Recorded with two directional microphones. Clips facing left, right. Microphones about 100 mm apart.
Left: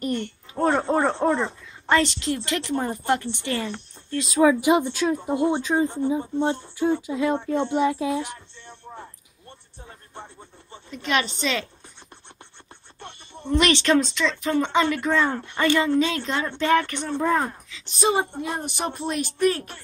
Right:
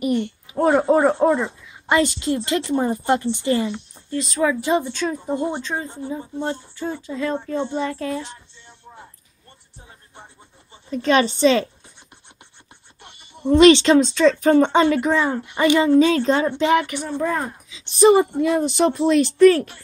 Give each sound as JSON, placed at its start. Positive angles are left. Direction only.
{"t": 0.0, "sound": "speech", "side_deg": -10}
{"t": 4.4, "sound": "speech", "side_deg": 15}
{"t": 10.9, "sound": "a woman's voice", "side_deg": -35}
{"t": 13.0, "sound": "music", "side_deg": -10}
{"t": 13.6, "sound": "speech", "side_deg": -25}
{"t": 14.4, "sound": "a woman's voice", "side_deg": -40}
{"t": 14.9, "sound": "speech", "side_deg": -15}
{"t": 17.2, "sound": "speech", "side_deg": 5}
{"t": 17.5, "sound": "speech", "side_deg": -15}
{"t": 18.6, "sound": "speech", "side_deg": -90}